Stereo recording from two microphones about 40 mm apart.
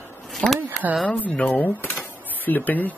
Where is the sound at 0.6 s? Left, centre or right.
Right.